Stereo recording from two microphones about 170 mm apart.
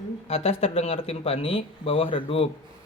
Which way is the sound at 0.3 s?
40° left (ahead or behind).